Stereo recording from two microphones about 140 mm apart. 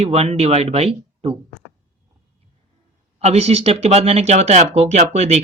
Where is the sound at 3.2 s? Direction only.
50° right (ahead or behind).